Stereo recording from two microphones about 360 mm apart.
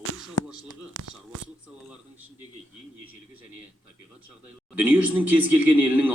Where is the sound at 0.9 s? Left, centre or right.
Right.